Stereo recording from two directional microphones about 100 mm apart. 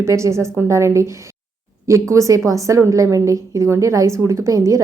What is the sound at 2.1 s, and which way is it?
Speech, 35° right (ahead or behind).